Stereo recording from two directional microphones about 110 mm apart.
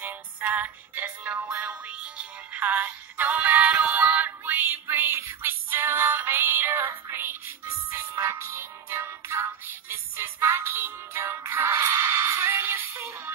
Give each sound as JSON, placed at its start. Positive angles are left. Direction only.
{"t": 0.0, "sound": "music", "side_deg": -15}